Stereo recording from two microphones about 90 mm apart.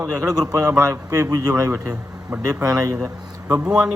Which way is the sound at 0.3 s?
45° right (ahead or behind).